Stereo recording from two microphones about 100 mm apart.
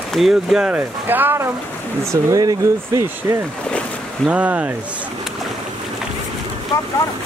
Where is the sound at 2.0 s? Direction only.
35° right (ahead or behind).